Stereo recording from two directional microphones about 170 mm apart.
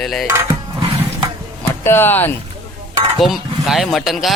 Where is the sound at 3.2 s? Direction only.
Centre (ahead or behind).